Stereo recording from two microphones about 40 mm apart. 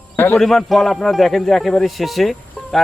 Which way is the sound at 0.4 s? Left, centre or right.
Centre.